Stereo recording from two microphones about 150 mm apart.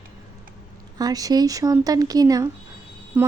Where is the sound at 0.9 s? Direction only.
25° right (ahead or behind).